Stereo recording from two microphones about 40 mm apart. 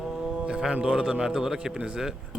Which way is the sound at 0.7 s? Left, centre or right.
Right.